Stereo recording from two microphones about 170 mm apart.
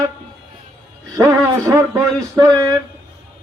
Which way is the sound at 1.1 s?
15° right (ahead or behind).